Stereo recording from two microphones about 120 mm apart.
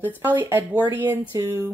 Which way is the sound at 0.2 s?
15° right (ahead or behind).